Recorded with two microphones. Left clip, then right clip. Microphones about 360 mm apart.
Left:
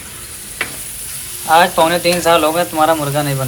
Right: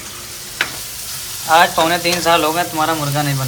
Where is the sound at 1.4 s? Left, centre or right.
Centre.